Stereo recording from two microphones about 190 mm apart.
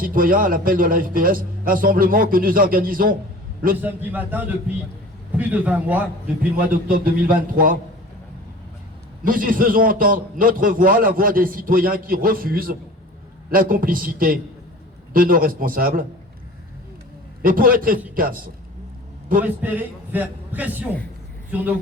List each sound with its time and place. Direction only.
0.0 s a man's voice: 45° right (ahead or behind)
3.8 s a man's voice: 10° right (ahead or behind)
6.7 s a man's voice: 50° right (ahead or behind)
9.2 s a man's voice: 45° right (ahead or behind)
17.4 s a man's voice: 50° right (ahead or behind)
19.4 s a man's voice: 10° right (ahead or behind)